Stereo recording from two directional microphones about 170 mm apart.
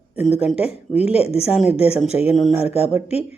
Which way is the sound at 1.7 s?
35° left (ahead or behind).